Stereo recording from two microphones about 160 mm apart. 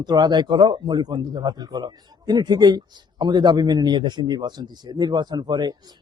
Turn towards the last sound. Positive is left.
turn(degrees=-25)  # may be behind; listen again after turning